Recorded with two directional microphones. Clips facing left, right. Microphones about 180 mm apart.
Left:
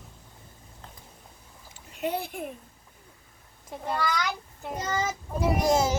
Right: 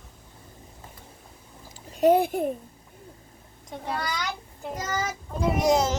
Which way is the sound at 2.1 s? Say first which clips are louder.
Right 12 dB; 50° right (ahead or behind).